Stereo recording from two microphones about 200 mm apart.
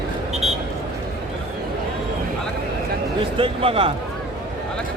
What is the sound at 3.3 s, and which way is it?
Speech, 25° right (ahead or behind).